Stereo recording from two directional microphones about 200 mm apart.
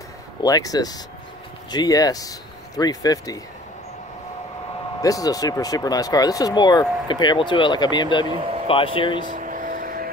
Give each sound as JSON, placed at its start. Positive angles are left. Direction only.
{"t": 0.4, "sound": "speech", "side_deg": 15}
{"t": 5.0, "sound": "speech", "side_deg": 15}
{"t": 8.3, "sound": "speech", "side_deg": -25}
{"t": 8.6, "sound": "speech", "side_deg": 25}
{"t": 9.4, "sound": "vehicle", "side_deg": -40}